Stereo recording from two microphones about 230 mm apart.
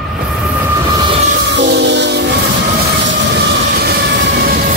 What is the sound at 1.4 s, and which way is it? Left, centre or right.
Train, right.